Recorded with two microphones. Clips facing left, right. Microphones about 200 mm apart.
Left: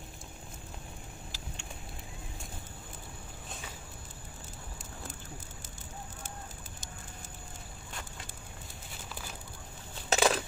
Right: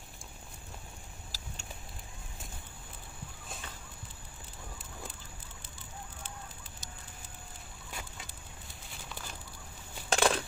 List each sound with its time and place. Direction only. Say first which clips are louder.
1.3 s vehicle: left 3 dB; 40° right (ahead or behind)
10.0 s crushing: left 1 dB; 5° left (ahead or behind)